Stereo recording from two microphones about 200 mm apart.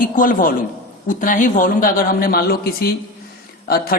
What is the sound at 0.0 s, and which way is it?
A woman's voice, 45° left (ahead or behind).